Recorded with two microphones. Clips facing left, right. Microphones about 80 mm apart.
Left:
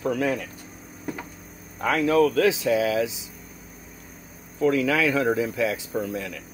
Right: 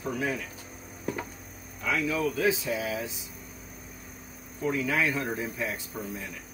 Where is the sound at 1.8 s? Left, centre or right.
Left.